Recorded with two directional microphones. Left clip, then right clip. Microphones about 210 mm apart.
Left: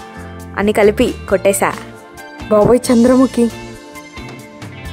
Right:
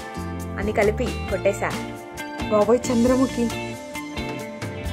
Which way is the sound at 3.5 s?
Centre (ahead or behind).